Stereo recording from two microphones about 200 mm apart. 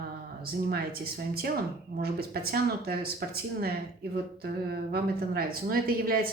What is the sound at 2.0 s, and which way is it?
A woman's voice, 50° right (ahead or behind).